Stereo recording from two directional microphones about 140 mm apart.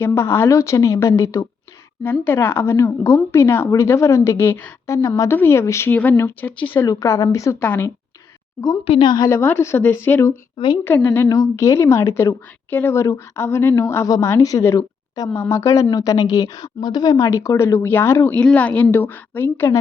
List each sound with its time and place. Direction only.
0.0 s a woman's voice: 15° left (ahead or behind)
8.8 s a woman's voice: 40° left (ahead or behind); by 19.7 s 15° left (ahead or behind)